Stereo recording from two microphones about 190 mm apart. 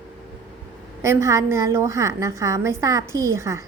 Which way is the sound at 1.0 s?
15° right (ahead or behind).